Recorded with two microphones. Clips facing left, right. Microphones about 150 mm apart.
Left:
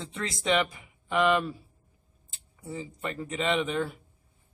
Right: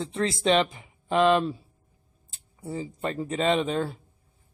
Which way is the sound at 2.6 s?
35° right (ahead or behind).